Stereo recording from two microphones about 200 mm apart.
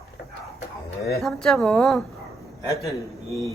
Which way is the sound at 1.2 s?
Centre (ahead or behind).